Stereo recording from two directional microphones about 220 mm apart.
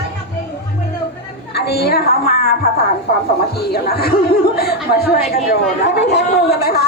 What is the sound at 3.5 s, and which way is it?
Speech, 45° left (ahead or behind).